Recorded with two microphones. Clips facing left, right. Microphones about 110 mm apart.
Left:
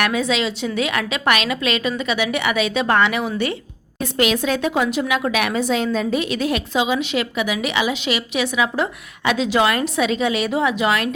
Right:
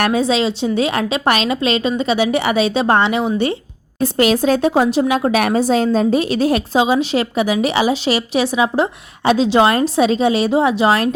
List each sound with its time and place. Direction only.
0.0 s a woman's voice: 30° right (ahead or behind)